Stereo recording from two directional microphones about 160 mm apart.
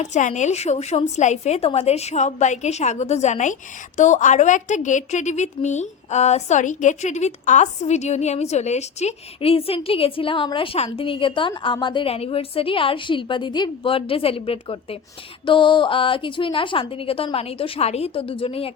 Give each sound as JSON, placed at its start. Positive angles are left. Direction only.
{"t": 0.0, "sound": "a woman's voice", "side_deg": 50}